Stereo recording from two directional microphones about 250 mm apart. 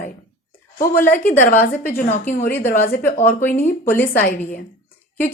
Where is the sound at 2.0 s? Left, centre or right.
Left.